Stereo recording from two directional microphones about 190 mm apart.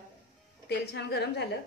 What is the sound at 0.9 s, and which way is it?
Speech, 60° left (ahead or behind).